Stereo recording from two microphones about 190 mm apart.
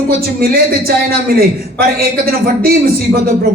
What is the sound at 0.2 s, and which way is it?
A man's voice, 50° right (ahead or behind).